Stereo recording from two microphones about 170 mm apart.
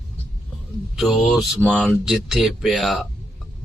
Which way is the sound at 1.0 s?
Centre (ahead or behind).